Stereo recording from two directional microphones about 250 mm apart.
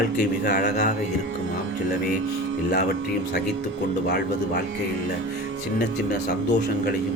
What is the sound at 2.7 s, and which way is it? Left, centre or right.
Speech, left.